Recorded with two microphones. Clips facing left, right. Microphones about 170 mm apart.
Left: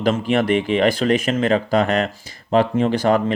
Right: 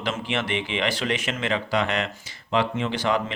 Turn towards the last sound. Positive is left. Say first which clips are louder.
# left 7 dB
turn(degrees=45)  # may be behind; listen again after turning